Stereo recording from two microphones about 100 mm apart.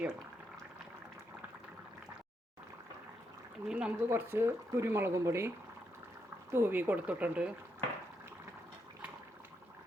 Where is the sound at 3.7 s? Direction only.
10° right (ahead or behind).